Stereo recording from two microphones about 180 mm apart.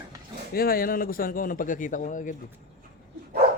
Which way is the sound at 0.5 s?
55° left (ahead or behind).